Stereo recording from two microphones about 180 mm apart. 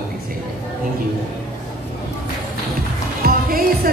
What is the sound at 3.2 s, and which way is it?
Music, 55° right (ahead or behind).